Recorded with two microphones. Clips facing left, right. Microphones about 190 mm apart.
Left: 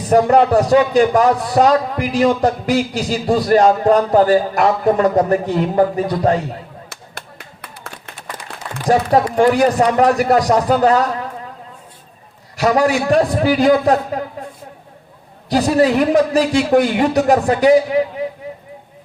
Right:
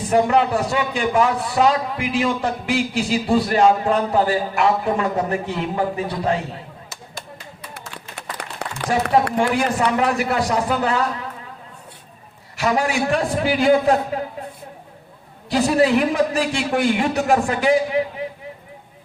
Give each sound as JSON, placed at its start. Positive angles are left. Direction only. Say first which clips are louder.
{"t": 0.1, "sound": "a man's voice", "louder": "left 5 dB", "side_deg": 40}
{"t": 6.9, "sound": "a sound", "louder": "even", "side_deg": 60}
{"t": 8.1, "sound": "a sound", "louder": "right 1 dB", "side_deg": -65}
{"t": 9.4, "sound": "a man's voice", "louder": "left 7 dB", "side_deg": 40}
{"t": 12.5, "sound": "a man's voice", "louder": "left 5 dB", "side_deg": 40}
{"t": 15.4, "sound": "a man's voice", "louder": "left 3 dB", "side_deg": 40}